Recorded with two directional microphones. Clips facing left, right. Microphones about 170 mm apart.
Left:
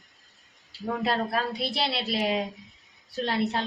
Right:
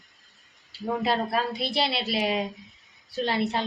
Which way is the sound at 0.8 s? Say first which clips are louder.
Right 1 dB; 5° right (ahead or behind).